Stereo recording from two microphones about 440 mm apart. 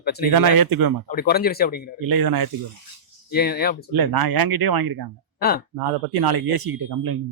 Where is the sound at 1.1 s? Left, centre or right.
Left.